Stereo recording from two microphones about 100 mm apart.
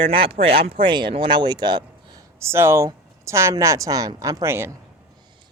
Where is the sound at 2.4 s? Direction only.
25° right (ahead or behind).